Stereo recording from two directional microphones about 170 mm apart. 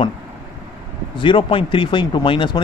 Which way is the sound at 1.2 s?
30° left (ahead or behind).